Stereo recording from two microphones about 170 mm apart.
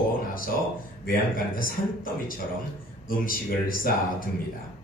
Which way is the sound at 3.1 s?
55° left (ahead or behind).